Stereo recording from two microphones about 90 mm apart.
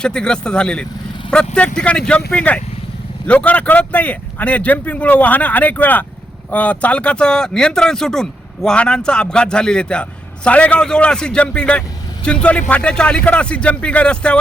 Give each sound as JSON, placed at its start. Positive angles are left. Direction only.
{"t": 0.0, "sound": "speech", "side_deg": 10}